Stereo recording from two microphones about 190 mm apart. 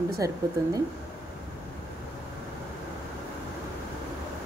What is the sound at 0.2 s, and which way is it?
Speech, 15° right (ahead or behind).